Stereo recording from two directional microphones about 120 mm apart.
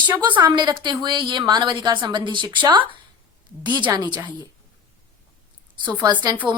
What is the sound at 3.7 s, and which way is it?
Speech, 40° right (ahead or behind).